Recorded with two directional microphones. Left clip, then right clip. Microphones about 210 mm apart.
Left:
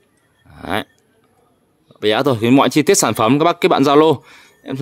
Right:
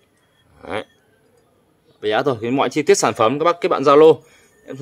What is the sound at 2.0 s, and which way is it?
Speech, 45° left (ahead or behind).